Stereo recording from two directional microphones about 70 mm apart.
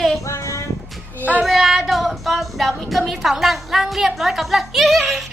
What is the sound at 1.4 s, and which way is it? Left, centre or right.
Speech, centre.